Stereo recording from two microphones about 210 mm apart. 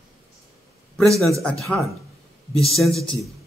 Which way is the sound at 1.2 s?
Centre (ahead or behind).